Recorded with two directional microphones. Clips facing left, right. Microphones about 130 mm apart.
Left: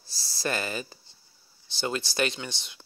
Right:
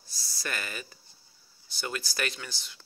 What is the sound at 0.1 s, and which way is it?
Speech, 30° left (ahead or behind).